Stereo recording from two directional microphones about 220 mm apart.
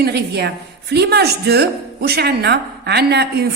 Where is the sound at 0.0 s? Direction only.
50° right (ahead or behind).